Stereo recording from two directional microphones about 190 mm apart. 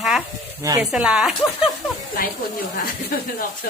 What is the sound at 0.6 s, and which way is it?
Speech, 15° right (ahead or behind).